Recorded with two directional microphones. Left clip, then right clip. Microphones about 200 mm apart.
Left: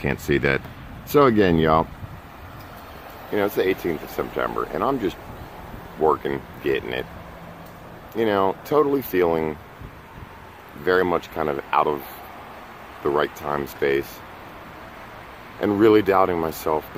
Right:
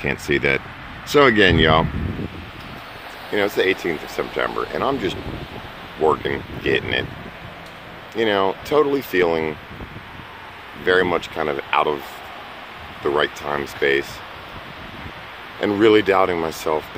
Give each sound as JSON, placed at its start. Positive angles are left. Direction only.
{"t": 0.0, "sound": "speech", "side_deg": 5}
{"t": 3.3, "sound": "speech", "side_deg": 5}
{"t": 8.2, "sound": "speech", "side_deg": 5}
{"t": 10.9, "sound": "speech", "side_deg": 5}
{"t": 13.0, "sound": "speech", "side_deg": 0}
{"t": 15.8, "sound": "speech", "side_deg": 5}